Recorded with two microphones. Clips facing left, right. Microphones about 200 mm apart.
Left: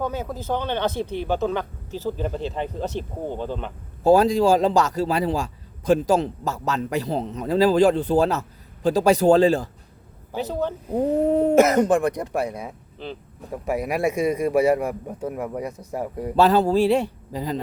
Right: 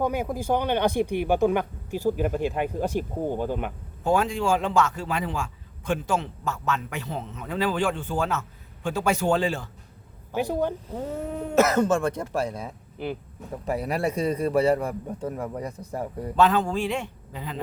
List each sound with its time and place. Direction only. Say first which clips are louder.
0.0 s speech: right 2 dB; 15° right (ahead or behind)
4.0 s speech: left 7 dB; 35° left (ahead or behind)
10.3 s speech: even; 15° right (ahead or behind)
10.9 s speech: left 11 dB; 35° left (ahead or behind)
11.5 s a man's voice: left 1 dB; 15° left (ahead or behind)
16.3 s speech: left 4 dB; 35° left (ahead or behind)